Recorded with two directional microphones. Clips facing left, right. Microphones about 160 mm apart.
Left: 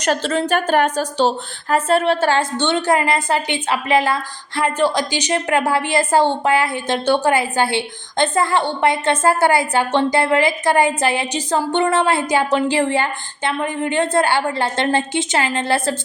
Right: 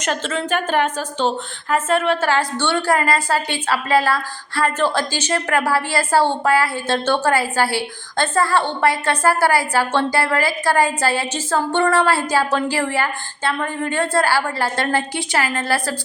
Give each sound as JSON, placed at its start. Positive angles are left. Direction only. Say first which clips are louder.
{"t": 0.0, "sound": "a woman's voice", "louder": "left 4 dB", "side_deg": 35}